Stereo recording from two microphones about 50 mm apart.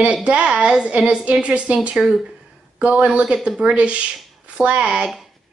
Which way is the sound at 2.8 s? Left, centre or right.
Right.